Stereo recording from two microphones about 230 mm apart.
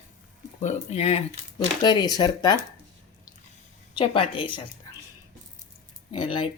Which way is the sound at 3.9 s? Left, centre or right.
Left.